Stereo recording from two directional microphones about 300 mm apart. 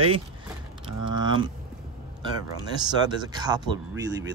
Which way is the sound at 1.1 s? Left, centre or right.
Centre.